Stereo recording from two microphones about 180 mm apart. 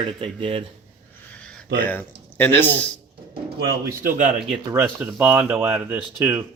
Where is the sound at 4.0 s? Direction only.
45° right (ahead or behind).